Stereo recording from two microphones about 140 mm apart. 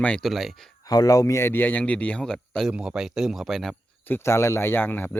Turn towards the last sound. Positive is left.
turn(degrees=15)  # may be behind; listen again after turning